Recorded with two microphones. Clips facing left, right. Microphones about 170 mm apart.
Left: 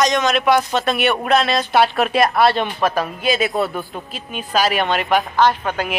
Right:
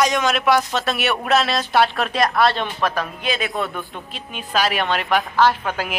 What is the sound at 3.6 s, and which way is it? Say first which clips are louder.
Speech: left 4 dB; 35° left (ahead or behind).